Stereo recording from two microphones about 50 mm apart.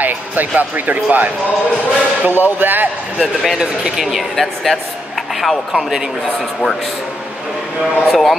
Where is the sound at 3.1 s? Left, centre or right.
Centre.